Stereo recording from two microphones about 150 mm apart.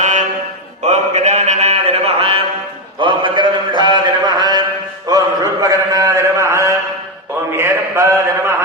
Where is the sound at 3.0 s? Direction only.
35° right (ahead or behind).